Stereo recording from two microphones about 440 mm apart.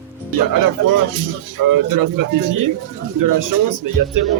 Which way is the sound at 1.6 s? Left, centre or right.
Right.